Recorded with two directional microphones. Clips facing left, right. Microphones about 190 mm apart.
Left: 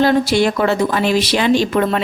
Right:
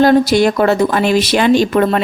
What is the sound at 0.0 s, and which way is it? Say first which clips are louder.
A woman's voice: right 4 dB; 45° right (ahead or behind).